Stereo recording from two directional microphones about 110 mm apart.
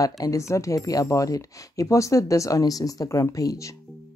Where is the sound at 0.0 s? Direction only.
30° left (ahead or behind).